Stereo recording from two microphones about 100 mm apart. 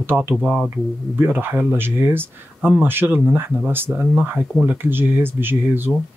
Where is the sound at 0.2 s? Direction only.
15° right (ahead or behind).